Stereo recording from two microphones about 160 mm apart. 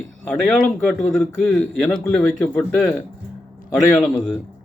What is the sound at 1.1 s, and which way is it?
Speech, centre (ahead or behind).